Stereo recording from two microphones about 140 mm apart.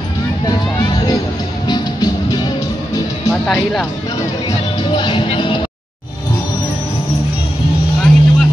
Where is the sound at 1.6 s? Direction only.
30° left (ahead or behind).